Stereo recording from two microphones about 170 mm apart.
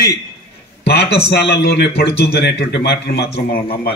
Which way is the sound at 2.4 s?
85° left.